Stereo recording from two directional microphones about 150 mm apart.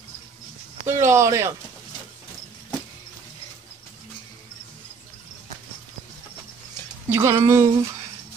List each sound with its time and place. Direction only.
0.8 s speech: 15° right (ahead or behind)
7.1 s speech: 20° right (ahead or behind)